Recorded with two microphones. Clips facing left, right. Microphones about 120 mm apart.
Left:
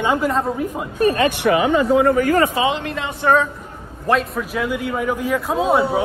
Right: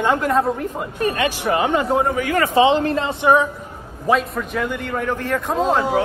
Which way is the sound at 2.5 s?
35° right (ahead or behind).